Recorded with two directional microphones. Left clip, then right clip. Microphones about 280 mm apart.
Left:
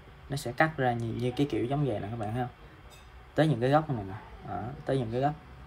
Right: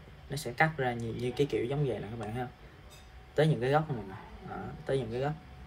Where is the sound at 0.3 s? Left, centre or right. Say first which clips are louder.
Left 2 dB; centre.